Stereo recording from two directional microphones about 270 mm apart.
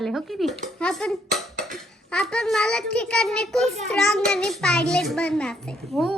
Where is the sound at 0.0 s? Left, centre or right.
Centre.